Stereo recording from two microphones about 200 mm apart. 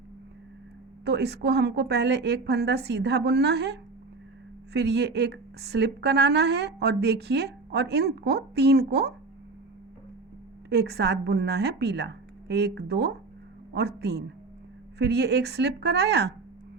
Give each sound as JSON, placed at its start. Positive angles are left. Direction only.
{"t": 1.0, "sound": "a woman's voice", "side_deg": -55}
{"t": 10.7, "sound": "a woman's voice", "side_deg": -55}